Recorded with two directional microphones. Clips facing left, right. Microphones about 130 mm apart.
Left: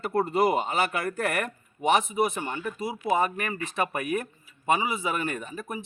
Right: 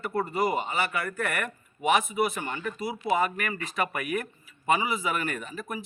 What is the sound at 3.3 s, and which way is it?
A man's voice, 25° left (ahead or behind).